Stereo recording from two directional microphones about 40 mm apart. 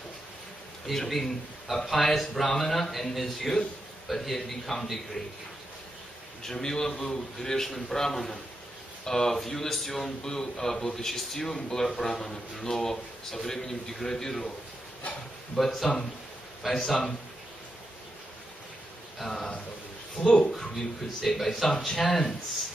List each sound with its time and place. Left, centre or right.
0.8 s speech: centre
6.5 s a man's voice: centre
10.2 s a man's voice: centre
15.5 s a man's voice: centre
19.1 s a man's voice: centre